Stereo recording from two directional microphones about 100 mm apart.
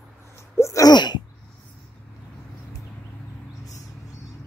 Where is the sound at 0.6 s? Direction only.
30° left (ahead or behind).